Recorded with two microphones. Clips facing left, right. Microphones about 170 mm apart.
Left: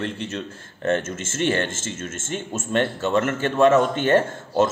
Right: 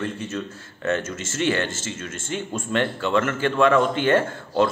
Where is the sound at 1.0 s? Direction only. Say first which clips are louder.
Even; 50° left (ahead or behind).